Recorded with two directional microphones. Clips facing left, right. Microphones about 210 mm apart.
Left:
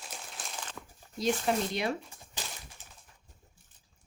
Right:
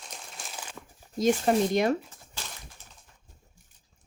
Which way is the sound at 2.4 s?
15° left (ahead or behind).